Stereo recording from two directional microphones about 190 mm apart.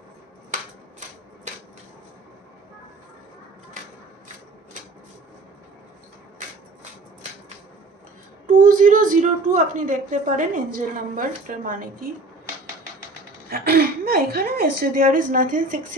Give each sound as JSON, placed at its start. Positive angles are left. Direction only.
{"t": 0.5, "sound": "a sound", "side_deg": -40}
{"t": 8.5, "sound": "a woman's voice", "side_deg": -45}
{"t": 13.5, "sound": "a woman's voice", "side_deg": -55}